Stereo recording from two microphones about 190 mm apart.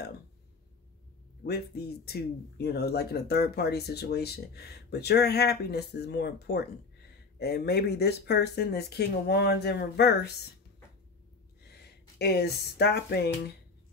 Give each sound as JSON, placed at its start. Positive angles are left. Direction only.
{"t": 1.4, "sound": "speech", "side_deg": 45}
{"t": 12.2, "sound": "speech", "side_deg": 60}